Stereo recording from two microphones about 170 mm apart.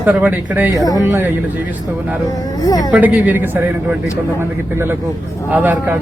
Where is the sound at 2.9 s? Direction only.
10° right (ahead or behind).